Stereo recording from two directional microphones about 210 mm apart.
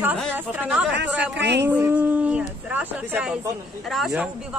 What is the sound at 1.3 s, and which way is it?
Speech, 55° right (ahead or behind).